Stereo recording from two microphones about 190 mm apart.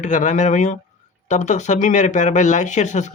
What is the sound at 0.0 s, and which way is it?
Speech, 40° left (ahead or behind).